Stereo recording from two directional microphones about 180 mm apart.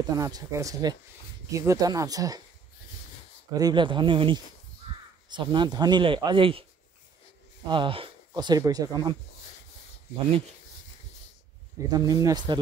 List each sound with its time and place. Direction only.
0.1 s speech: 20° right (ahead or behind)
3.5 s speech: 25° right (ahead or behind)
7.6 s speech: 25° right (ahead or behind)
11.9 s speech: 20° right (ahead or behind)